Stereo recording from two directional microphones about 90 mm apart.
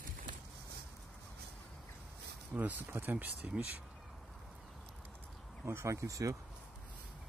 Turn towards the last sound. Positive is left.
turn(degrees=-40)  # may be behind; listen again after turning